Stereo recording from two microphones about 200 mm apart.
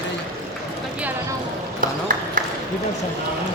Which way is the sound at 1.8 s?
40° right (ahead or behind).